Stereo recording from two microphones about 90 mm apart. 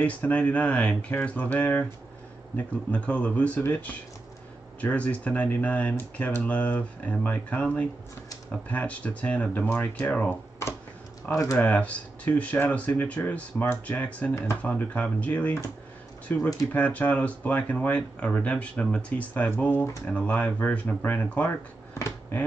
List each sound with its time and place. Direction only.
0.0 s speech: 15° left (ahead or behind)
11.5 s speech: 15° left (ahead or behind)